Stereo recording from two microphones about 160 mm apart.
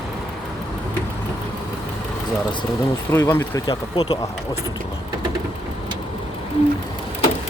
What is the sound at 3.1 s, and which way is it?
Speech, 15° left (ahead or behind).